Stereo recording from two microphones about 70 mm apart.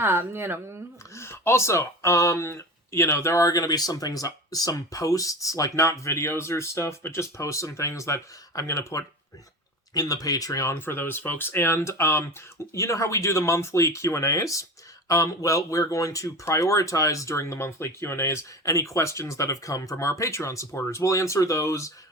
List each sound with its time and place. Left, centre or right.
0.0 s a woman's voice: right
1.1 s speech: left
3.4 s speech: left
9.9 s speech: left
10.7 s speech: left